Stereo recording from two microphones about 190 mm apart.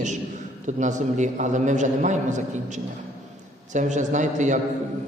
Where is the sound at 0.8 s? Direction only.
40° right (ahead or behind).